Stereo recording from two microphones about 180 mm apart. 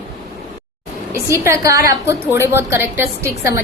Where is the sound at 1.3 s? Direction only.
15° right (ahead or behind).